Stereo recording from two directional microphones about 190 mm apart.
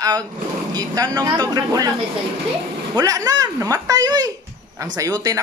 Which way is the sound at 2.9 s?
20° right (ahead or behind).